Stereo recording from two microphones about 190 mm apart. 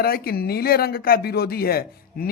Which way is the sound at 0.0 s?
50° left (ahead or behind).